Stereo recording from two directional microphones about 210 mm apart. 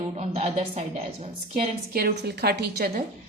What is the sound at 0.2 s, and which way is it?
A woman's voice, 30° right (ahead or behind).